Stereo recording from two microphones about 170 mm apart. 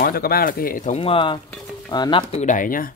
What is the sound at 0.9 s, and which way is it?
Speech, 30° left (ahead or behind).